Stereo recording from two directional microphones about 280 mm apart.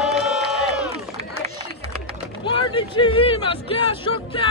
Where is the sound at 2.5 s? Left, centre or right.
Centre.